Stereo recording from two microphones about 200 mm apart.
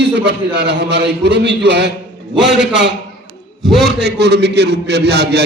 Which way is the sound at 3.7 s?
55° right (ahead or behind).